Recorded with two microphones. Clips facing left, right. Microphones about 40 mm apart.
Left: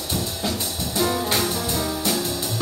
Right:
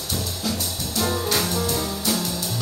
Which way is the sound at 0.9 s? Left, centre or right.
Centre.